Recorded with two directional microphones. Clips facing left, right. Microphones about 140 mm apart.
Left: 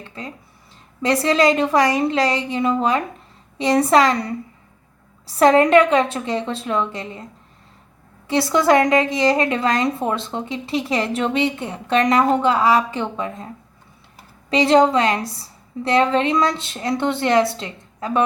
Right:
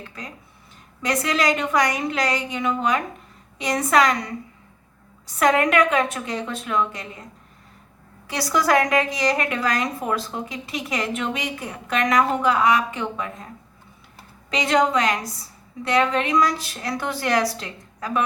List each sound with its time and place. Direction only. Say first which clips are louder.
0.0 s a woman's voice: left 4 dB; 25° left (ahead or behind)
8.3 s a woman's voice: left 5 dB; 25° left (ahead or behind)
14.5 s a woman's voice: left 5 dB; 30° left (ahead or behind)